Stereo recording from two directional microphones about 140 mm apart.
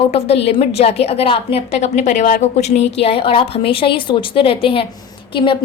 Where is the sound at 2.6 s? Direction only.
50° left (ahead or behind).